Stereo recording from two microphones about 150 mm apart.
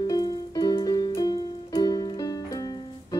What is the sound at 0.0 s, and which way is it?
Music, 25° left (ahead or behind).